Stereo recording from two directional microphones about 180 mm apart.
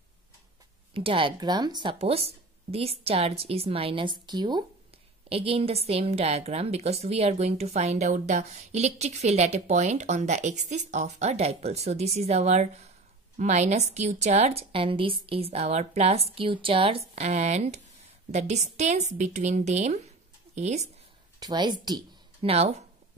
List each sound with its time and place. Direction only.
0.9 s a woman's voice: 30° right (ahead or behind)
21.4 s speech: 25° right (ahead or behind)